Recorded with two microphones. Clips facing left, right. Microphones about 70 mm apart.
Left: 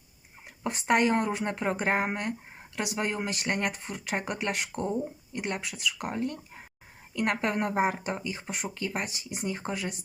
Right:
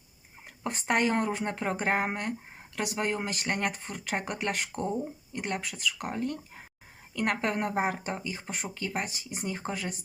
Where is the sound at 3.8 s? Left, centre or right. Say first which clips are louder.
Left 1 dB; left.